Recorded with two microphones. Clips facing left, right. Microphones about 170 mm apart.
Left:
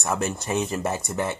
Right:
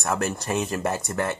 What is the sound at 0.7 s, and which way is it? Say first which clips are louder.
Speech: right 1 dB; 5° left (ahead or behind).